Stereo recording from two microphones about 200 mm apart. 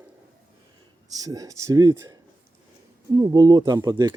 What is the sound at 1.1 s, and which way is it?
Speech, 15° right (ahead or behind).